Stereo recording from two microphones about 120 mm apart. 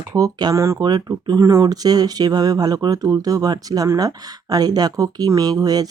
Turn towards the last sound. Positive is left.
turn(degrees=-35)  # may be behind; listen again after turning